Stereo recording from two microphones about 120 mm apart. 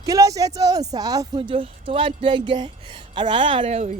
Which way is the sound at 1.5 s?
45° right (ahead or behind).